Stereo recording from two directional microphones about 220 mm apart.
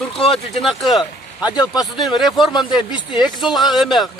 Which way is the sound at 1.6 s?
20° left (ahead or behind).